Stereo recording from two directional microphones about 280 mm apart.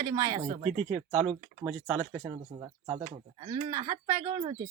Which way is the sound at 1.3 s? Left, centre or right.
Centre.